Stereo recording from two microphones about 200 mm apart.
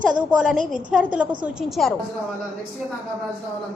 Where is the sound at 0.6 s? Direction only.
40° right (ahead or behind).